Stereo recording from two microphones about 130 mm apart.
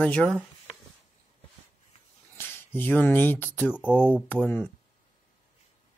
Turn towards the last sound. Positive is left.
turn(degrees=10)  # may be behind; listen again after turning